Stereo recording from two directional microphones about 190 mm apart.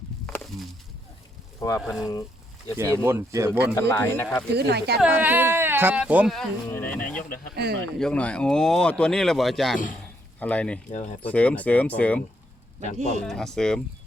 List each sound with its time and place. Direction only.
0.3 s a sound: 10° left (ahead or behind)
1.5 s speech: 15° left (ahead or behind)
1.8 s speech: centre (ahead or behind)
2.7 s speech: 15° right (ahead or behind)
3.8 s speech: 15° left (ahead or behind)
4.5 s speech: 60° right (ahead or behind)
4.9 s speech: 5° right (ahead or behind)
6.7 s speech: 10° left (ahead or behind)
7.2 s speech: 45° left (ahead or behind)
7.5 s speech: 60° right (ahead or behind)
7.9 s speech: 5° left (ahead or behind)
10.8 s speech: 40° left (ahead or behind)
11.2 s speech: 5° left (ahead or behind)
13.2 s speech: 5° left (ahead or behind)